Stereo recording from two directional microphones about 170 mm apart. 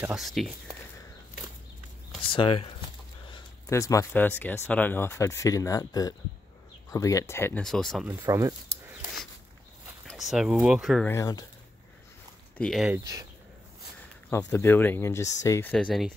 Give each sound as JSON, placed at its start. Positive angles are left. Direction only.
{"t": 0.0, "sound": "speech", "side_deg": 0}
{"t": 2.3, "sound": "speech", "side_deg": 30}
{"t": 3.3, "sound": "a sound", "side_deg": 30}
{"t": 3.7, "sound": "speech", "side_deg": 20}
{"t": 7.6, "sound": "speech", "side_deg": 0}
{"t": 8.1, "sound": "speech", "side_deg": -20}
{"t": 10.0, "sound": "speech", "side_deg": 0}
{"t": 11.1, "sound": "speech", "side_deg": 20}
{"t": 12.5, "sound": "speech", "side_deg": 0}
{"t": 12.9, "sound": "speech", "side_deg": -20}
{"t": 14.3, "sound": "speech", "side_deg": 15}
{"t": 15.7, "sound": "speech", "side_deg": 0}